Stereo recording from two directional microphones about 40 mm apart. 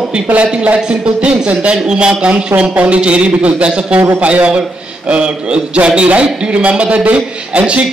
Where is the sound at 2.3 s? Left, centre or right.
Right.